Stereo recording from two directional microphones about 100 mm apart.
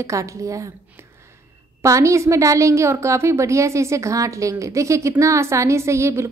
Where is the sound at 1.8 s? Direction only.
30° right (ahead or behind).